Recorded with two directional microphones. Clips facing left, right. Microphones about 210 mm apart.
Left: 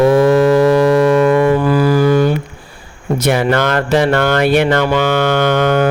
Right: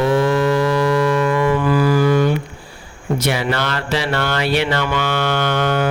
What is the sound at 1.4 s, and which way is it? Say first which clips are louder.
Music: left 4 dB; 35° left (ahead or behind).